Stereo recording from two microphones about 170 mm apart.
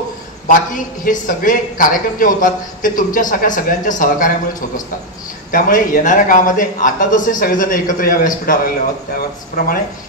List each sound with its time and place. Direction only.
0.5 s a man's voice: 50° left (ahead or behind)